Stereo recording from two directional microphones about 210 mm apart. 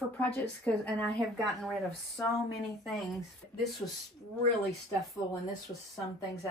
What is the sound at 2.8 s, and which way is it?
Speech, centre (ahead or behind).